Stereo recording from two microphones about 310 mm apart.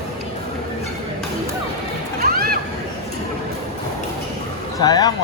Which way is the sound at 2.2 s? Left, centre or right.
Right.